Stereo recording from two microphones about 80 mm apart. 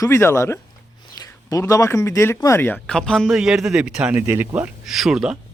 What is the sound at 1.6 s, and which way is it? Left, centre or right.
Speech, left.